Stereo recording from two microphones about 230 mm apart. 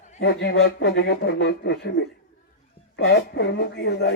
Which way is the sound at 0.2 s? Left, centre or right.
Left.